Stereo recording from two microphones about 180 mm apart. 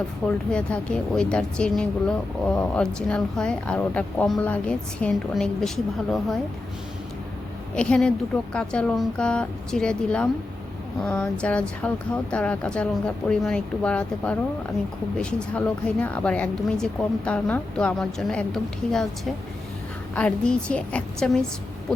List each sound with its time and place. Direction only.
0.3 s speech: 5° left (ahead or behind)
7.8 s speech: 5° left (ahead or behind)